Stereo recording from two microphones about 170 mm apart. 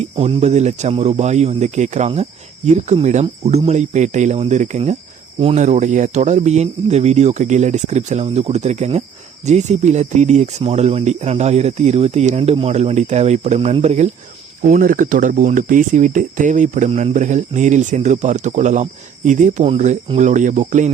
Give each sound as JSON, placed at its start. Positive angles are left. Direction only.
{"t": 0.0, "sound": "speech", "side_deg": -40}
{"t": 14.6, "sound": "speech", "side_deg": -50}